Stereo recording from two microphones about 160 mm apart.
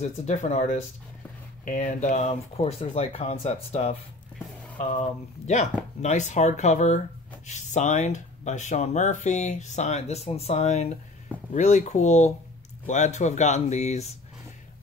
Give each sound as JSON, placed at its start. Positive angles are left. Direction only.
{"t": 0.0, "sound": "speech", "side_deg": 45}
{"t": 6.0, "sound": "speech", "side_deg": 45}